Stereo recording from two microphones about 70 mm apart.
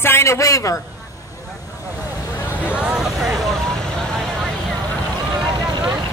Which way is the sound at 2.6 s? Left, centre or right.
Centre.